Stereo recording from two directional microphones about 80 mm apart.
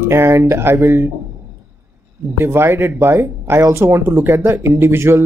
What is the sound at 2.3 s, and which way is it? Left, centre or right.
Speech, right.